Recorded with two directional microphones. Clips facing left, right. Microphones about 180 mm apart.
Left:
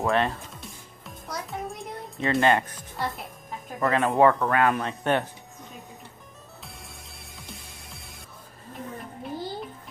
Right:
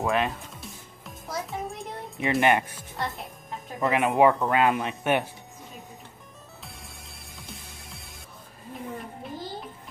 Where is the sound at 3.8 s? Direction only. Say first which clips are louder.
Even; 15° right (ahead or behind).